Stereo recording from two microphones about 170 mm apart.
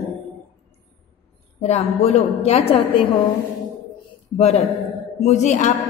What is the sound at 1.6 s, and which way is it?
A woman's voice, 40° left (ahead or behind).